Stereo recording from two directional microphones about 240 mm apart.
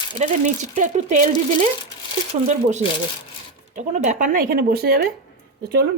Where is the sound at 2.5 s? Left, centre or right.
Right.